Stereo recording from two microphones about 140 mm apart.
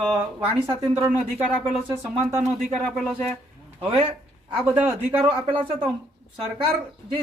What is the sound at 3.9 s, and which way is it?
Speech, 40° right (ahead or behind).